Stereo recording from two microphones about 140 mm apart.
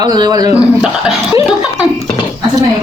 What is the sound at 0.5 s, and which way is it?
Speech, 5° right (ahead or behind).